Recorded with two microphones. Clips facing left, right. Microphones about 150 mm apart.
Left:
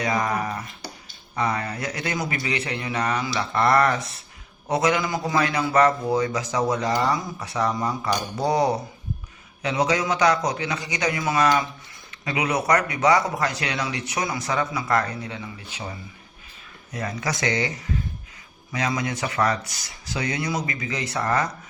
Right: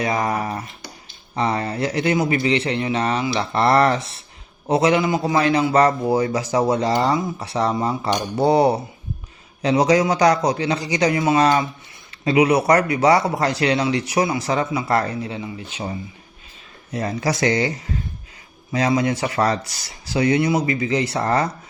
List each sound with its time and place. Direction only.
0.0 s a man's voice: 25° right (ahead or behind)
18.7 s a man's voice: 30° right (ahead or behind)